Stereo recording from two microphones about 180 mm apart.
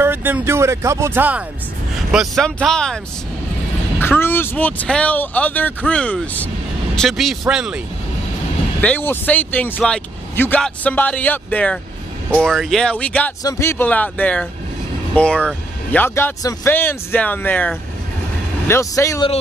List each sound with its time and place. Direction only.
0.0 s speech: 10° right (ahead or behind)
2.1 s speech: centre (ahead or behind)
4.0 s speech: 10° left (ahead or behind); by 7.8 s 5° right (ahead or behind)
8.8 s speech: 10° left (ahead or behind)